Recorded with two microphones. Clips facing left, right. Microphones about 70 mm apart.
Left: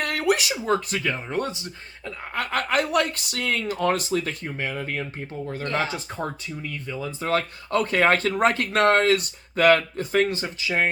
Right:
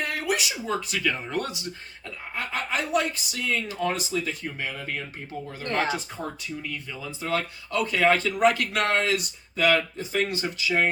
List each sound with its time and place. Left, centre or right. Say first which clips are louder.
0.0 s speech: left 4 dB; left
1.0 s speech: left 1 dB; left
2.3 s speech: left 5 dB; left
4.4 s speech: left 3 dB; left
5.6 s speech: even; right
6.9 s speech: left 4 dB; left
10.2 s speech: left 1 dB; left